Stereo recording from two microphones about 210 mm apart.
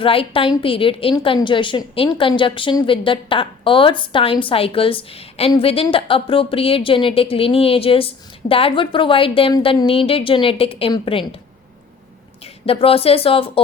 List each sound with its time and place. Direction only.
0.0 s a woman's voice: 25° left (ahead or behind)
12.6 s a woman's voice: 25° left (ahead or behind)